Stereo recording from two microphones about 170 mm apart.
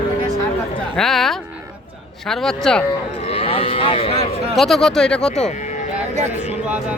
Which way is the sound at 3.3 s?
35° left (ahead or behind).